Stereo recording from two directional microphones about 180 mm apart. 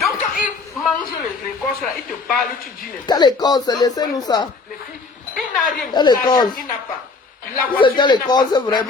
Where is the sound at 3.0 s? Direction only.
25° left (ahead or behind).